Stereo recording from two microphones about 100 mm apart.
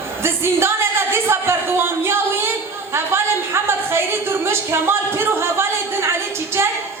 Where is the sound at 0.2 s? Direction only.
25° right (ahead or behind).